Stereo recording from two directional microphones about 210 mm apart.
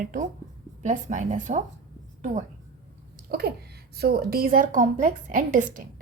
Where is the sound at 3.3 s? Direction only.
45° right (ahead or behind).